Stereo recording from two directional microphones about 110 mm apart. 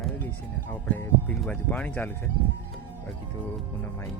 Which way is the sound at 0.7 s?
15° left (ahead or behind).